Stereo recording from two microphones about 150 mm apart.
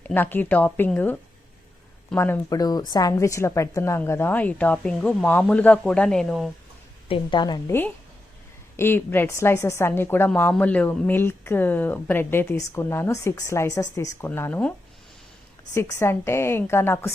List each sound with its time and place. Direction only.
0.1 s speech: 15° left (ahead or behind)
7.1 s a woman's voice: 30° left (ahead or behind)
7.7 s speech: 15° left (ahead or behind)
15.7 s speech: 20° left (ahead or behind)